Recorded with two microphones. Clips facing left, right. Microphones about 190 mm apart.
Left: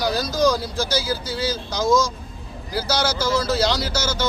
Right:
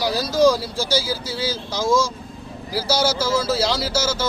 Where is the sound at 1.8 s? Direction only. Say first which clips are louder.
Left 1 dB; 30° right (ahead or behind).